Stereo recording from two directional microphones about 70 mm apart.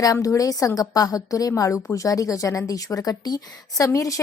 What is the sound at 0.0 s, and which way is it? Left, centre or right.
A woman's voice, left.